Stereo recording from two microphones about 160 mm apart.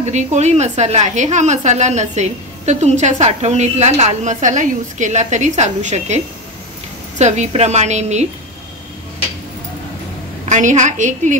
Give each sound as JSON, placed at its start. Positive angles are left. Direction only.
{"t": 0.0, "sound": "a woman's voice", "side_deg": -45}
{"t": 10.5, "sound": "a woman's voice", "side_deg": -50}